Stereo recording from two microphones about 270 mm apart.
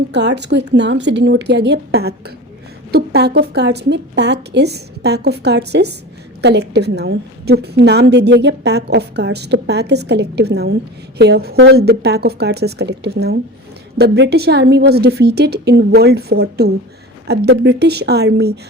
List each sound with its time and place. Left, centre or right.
0.1 s a woman's voice: right